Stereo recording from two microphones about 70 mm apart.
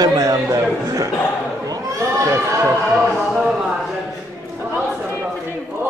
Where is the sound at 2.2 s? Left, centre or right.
Right.